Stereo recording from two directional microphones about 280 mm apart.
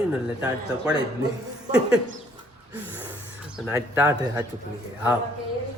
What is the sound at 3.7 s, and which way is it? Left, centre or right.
Speech, centre.